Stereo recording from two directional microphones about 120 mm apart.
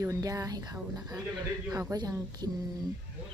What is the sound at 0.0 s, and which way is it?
A woman's voice, 30° right (ahead or behind).